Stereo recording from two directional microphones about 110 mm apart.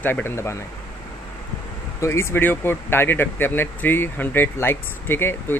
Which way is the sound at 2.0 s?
25° left (ahead or behind).